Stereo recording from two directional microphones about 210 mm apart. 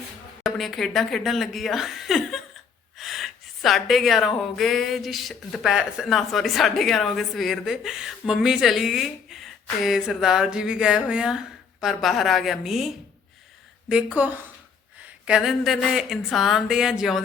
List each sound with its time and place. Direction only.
0.4 s speech: centre (ahead or behind)
13.9 s speech: 5° right (ahead or behind)